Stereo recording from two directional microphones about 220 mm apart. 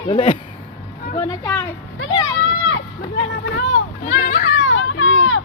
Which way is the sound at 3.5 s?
55° left (ahead or behind).